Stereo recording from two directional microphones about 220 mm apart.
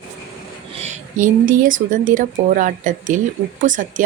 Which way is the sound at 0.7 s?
30° right (ahead or behind).